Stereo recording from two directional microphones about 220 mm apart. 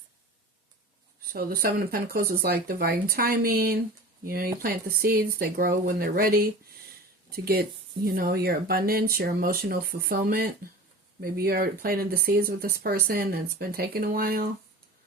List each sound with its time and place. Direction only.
1.3 s speech: 40° right (ahead or behind)